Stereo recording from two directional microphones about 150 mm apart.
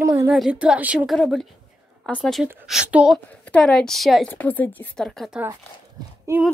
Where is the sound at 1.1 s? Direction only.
Centre (ahead or behind).